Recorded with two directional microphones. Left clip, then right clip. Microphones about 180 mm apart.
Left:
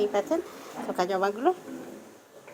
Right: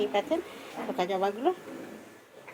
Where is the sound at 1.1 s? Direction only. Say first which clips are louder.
Left 3 dB; 15° left (ahead or behind).